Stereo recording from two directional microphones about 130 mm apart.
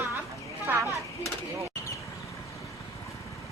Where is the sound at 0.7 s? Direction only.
15° right (ahead or behind).